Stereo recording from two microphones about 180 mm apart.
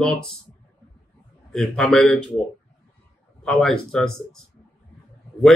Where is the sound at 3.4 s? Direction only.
Centre (ahead or behind).